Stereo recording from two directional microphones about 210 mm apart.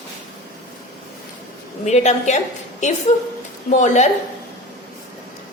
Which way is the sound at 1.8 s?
35° left (ahead or behind).